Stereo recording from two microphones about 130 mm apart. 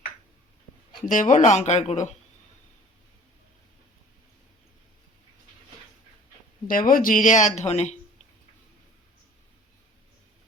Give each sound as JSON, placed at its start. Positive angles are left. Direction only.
{"t": 1.0, "sound": "speech", "side_deg": 85}
{"t": 6.7, "sound": "speech", "side_deg": 90}